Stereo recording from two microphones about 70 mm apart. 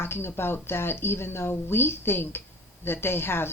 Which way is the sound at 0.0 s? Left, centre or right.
Left.